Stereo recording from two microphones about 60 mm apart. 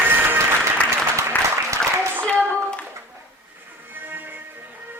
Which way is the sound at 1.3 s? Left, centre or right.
Left.